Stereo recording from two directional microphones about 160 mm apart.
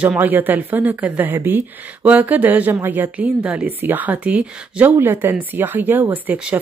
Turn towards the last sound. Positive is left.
turn(degrees=-10)  # may be behind; listen again after turning